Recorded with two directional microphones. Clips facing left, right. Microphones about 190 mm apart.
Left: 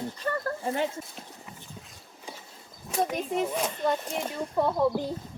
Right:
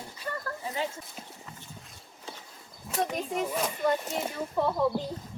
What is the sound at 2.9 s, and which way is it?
Speech, centre (ahead or behind).